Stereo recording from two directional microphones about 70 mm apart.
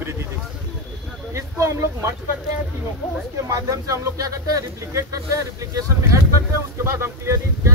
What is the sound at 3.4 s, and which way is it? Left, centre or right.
Speech, right.